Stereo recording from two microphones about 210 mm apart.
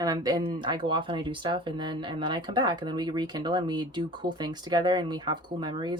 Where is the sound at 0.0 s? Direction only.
20° right (ahead or behind).